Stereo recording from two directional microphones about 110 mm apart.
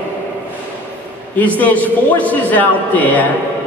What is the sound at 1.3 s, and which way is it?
A man's voice, 15° left (ahead or behind).